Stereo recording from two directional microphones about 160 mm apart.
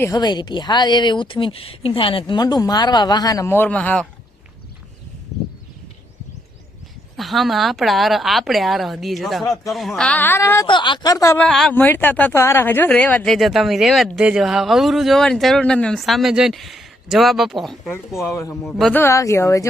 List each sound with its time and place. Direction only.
0.0 s speech: 25° left (ahead or behind); by 4.0 s 10° left (ahead or behind)
7.2 s speech: centre (ahead or behind); by 10.7 s 15° left (ahead or behind)
10.7 s speech: 30° left (ahead or behind)
11.4 s speech: 5° left (ahead or behind)
18.3 s speech: 20° left (ahead or behind)
18.5 s speech: centre (ahead or behind)
18.9 s speech: 15° left (ahead or behind)